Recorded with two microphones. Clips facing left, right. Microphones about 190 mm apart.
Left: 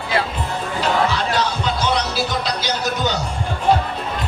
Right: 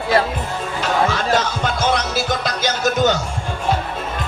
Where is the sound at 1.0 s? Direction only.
45° right (ahead or behind).